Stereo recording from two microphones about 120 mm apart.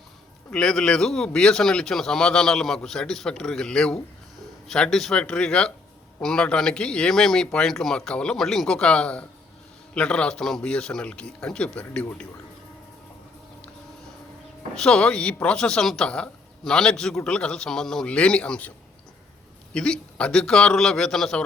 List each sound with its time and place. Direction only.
0.5 s a man's voice: 5° left (ahead or behind)
14.8 s a man's voice: 5° left (ahead or behind)
19.7 s a man's voice: 5° left (ahead or behind)